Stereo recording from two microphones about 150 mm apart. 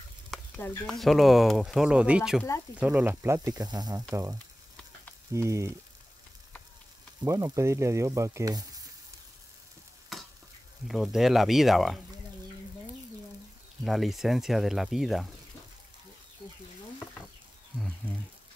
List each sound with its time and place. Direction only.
0.6 s speech: 5° left (ahead or behind); by 5.8 s 20° right (ahead or behind)
7.2 s speech: 20° right (ahead or behind)
10.1 s stir: centre (ahead or behind)
10.9 s speech: centre (ahead or behind)
13.8 s speech: centre (ahead or behind)
17.7 s a sound: 5° left (ahead or behind)